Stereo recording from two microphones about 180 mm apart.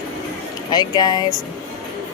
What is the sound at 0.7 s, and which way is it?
Speech, 20° left (ahead or behind).